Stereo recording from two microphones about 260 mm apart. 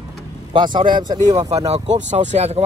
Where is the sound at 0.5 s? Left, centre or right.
Centre.